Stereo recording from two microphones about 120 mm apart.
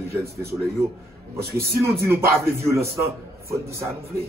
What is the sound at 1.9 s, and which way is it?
A man's voice, 20° right (ahead or behind).